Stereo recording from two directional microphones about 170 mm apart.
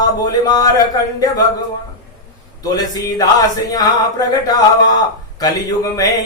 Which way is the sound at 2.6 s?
20° left (ahead or behind).